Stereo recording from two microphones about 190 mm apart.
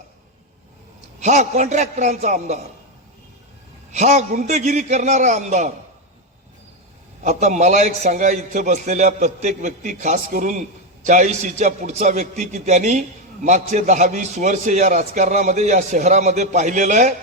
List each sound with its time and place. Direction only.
1.2 s a man's voice: 35° right (ahead or behind)
3.9 s a man's voice: 40° right (ahead or behind)
7.2 s a man's voice: 40° right (ahead or behind)